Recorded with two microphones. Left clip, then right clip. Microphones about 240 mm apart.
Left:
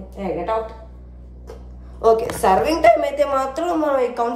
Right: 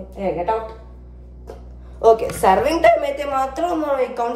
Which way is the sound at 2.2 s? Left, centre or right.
Centre.